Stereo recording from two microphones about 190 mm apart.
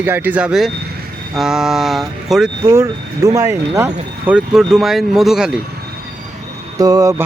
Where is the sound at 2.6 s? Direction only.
15° right (ahead or behind).